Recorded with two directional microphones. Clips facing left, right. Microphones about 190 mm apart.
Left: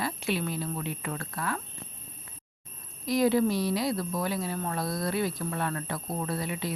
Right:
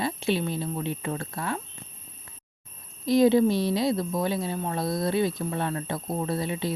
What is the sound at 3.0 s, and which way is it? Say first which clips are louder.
Speech: right 5 dB; 25° right (ahead or behind).